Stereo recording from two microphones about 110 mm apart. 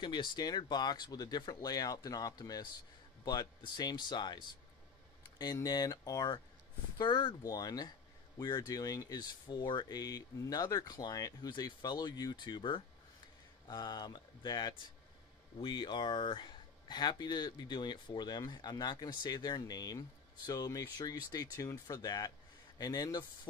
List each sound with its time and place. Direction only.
0.0 s speech: 45° left (ahead or behind)
7.4 s speech: 35° left (ahead or behind)